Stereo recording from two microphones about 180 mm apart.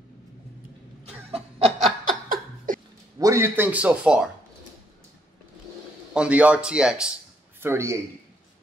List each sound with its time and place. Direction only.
1.0 s cough: 35° right (ahead or behind)
2.2 s laughter: 50° right (ahead or behind)
3.2 s a man's voice: 15° right (ahead or behind)
6.1 s a man's voice: 5° right (ahead or behind)